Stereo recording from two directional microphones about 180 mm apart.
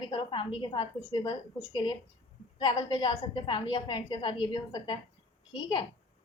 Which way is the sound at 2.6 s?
25° left (ahead or behind).